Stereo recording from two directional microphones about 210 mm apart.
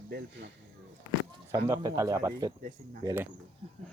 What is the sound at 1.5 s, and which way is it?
Speech, 15° right (ahead or behind).